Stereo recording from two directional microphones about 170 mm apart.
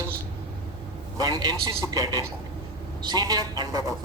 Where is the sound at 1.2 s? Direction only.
25° right (ahead or behind).